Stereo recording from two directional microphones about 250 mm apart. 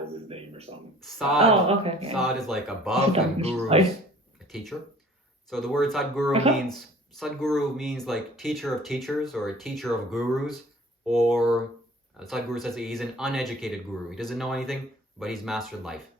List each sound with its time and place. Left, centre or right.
0.3 s a sound: right
1.0 s speech: centre
1.4 s speech: right
2.1 s speech: centre
3.1 s speech: right
4.7 s speech: centre